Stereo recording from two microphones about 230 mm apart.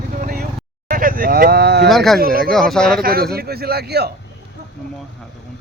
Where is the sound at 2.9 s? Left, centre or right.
Right.